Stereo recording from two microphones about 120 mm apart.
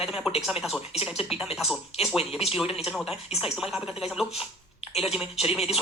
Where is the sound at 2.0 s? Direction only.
5° right (ahead or behind).